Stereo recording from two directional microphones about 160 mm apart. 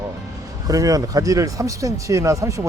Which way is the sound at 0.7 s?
20° right (ahead or behind).